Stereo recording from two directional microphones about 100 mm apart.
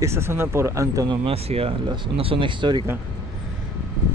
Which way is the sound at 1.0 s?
80° right.